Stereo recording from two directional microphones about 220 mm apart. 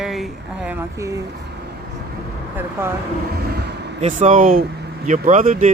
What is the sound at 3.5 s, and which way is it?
Vehicle, 45° right (ahead or behind).